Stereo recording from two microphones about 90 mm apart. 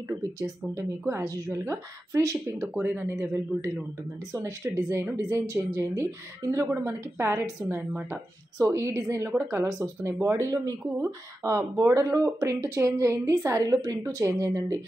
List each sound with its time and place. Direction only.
0.4 s speech: 30° right (ahead or behind)
2.7 s speech: 25° right (ahead or behind)
9.7 s speech: 35° right (ahead or behind)